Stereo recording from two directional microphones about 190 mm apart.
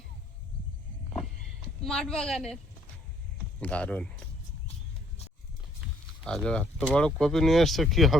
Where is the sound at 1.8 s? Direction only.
5° left (ahead or behind).